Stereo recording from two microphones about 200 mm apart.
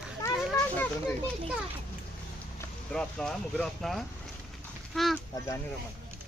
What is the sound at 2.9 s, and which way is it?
Speech, 5° left (ahead or behind).